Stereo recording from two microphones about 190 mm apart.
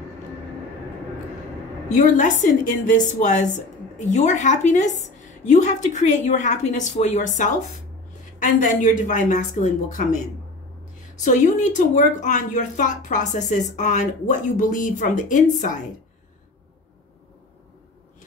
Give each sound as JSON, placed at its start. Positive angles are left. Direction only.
{"t": 2.0, "sound": "a woman's voice", "side_deg": 40}
{"t": 11.2, "sound": "a woman's voice", "side_deg": 40}